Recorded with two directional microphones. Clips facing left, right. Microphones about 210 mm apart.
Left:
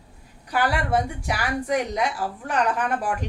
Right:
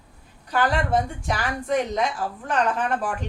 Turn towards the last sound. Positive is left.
turn(degrees=10)  # may be behind; listen again after turning